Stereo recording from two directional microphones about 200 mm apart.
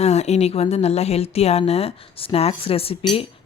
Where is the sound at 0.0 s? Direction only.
35° left (ahead or behind).